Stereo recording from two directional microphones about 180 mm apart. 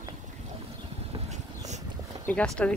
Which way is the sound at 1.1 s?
30° right (ahead or behind).